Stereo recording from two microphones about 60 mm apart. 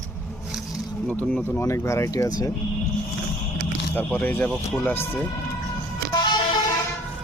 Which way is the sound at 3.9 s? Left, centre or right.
Left.